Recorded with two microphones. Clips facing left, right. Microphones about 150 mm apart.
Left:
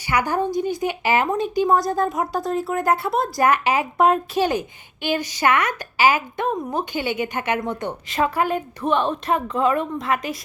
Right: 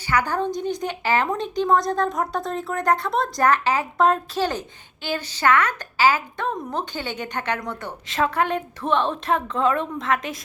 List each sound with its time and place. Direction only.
0.1 s a woman's voice: 10° left (ahead or behind)
8.1 s speech: 5° left (ahead or behind)